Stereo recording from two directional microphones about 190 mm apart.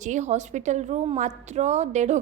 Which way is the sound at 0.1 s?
40° right (ahead or behind).